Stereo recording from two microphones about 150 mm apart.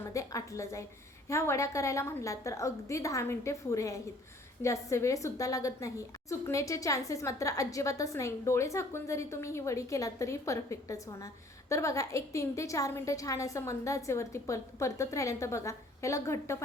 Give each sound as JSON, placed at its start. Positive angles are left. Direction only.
{"t": 0.0, "sound": "a woman's voice", "side_deg": 20}